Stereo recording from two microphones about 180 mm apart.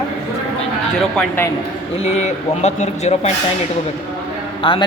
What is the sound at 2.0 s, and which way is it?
Speech, 35° left (ahead or behind).